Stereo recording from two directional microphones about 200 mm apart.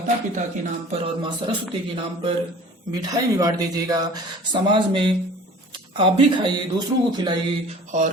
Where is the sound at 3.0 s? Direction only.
15° right (ahead or behind).